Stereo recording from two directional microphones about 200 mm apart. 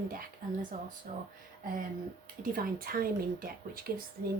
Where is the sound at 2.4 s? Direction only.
45° right (ahead or behind).